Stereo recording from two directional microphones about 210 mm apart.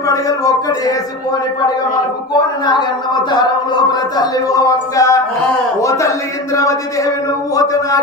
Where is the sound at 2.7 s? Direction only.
20° left (ahead or behind).